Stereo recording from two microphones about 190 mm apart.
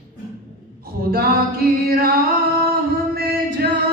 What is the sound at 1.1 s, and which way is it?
Music, 50° right (ahead or behind).